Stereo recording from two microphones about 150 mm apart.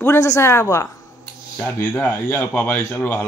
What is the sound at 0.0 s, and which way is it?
Speech, 20° left (ahead or behind).